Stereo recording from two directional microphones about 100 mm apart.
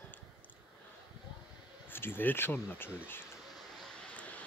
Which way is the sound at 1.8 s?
20° left (ahead or behind).